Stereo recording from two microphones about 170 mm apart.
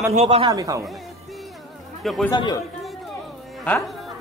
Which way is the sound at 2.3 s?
25° left (ahead or behind).